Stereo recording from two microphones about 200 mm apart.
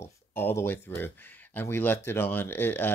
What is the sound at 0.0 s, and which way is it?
Speech, 10° left (ahead or behind).